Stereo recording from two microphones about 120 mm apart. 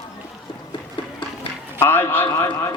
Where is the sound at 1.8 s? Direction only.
20° left (ahead or behind).